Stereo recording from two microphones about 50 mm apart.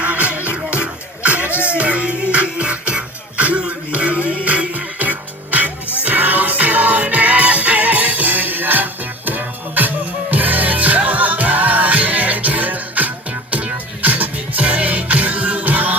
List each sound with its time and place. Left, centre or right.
0.0 s music: right
1.5 s music: left
1.8 s music: right